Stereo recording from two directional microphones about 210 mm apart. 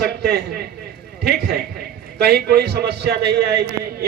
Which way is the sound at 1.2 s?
50° right (ahead or behind).